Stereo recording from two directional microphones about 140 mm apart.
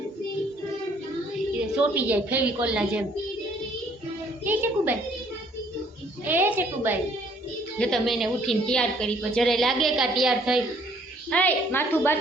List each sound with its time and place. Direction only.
1.7 s a woman's voice: 10° right (ahead or behind)
4.4 s a woman's voice: 15° right (ahead or behind)
6.2 s a woman's voice: 15° right (ahead or behind)
7.8 s a woman's voice: 5° left (ahead or behind)
11.3 s a woman's voice: 10° left (ahead or behind)